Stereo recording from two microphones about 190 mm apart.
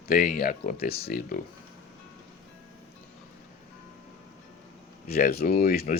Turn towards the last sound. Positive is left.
turn(degrees=50)  # may be behind; listen again after turning